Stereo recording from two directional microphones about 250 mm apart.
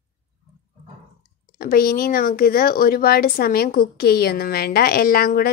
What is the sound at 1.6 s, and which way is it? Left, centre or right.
Speech, left.